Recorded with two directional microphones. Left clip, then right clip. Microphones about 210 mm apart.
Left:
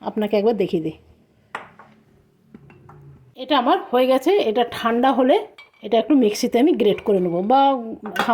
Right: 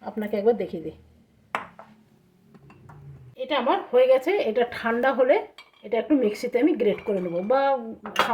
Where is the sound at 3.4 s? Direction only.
50° left (ahead or behind).